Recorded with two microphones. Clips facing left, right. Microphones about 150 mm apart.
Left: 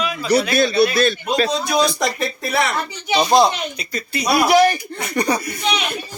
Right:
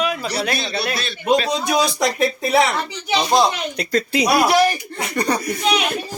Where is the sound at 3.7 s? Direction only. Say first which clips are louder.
Right 7 dB; 90° right.